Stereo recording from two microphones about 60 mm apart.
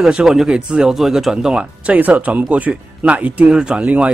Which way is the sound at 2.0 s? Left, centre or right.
Right.